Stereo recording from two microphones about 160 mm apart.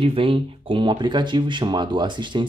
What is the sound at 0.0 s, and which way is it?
Speech, 35° right (ahead or behind).